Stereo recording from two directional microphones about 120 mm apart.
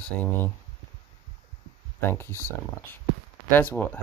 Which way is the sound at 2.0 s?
20° left (ahead or behind).